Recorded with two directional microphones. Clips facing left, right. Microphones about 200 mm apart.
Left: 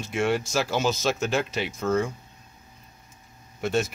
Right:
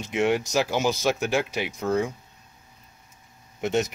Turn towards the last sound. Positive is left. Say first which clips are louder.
# right 1 dB
turn(degrees=-20)  # may be behind; listen again after turning